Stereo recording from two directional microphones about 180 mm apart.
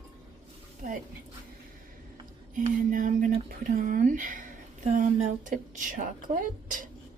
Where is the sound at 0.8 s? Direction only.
45° right (ahead or behind).